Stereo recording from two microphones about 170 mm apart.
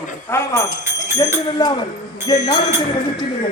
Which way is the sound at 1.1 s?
25° left (ahead or behind).